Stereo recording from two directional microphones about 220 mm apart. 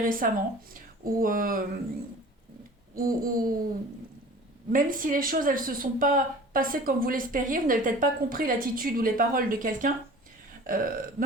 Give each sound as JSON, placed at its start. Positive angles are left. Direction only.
{"t": 0.0, "sound": "speech", "side_deg": -40}
{"t": 2.9, "sound": "speech", "side_deg": -40}
{"t": 4.7, "sound": "speech", "side_deg": -40}
{"t": 10.6, "sound": "burping", "side_deg": -40}